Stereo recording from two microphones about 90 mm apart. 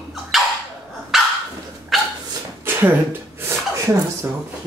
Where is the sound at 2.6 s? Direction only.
25° right (ahead or behind).